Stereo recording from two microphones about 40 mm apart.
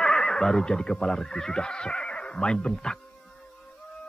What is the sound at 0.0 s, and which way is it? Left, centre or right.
Speech, centre.